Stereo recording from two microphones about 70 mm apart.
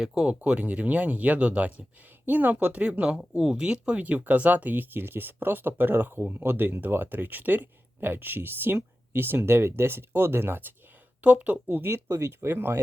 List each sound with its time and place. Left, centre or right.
0.0 s speech: centre
12.0 s speech: right
12.4 s speech: right